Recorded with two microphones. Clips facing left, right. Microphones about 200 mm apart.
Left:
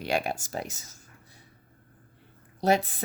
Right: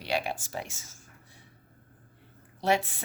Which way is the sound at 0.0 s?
45° left (ahead or behind).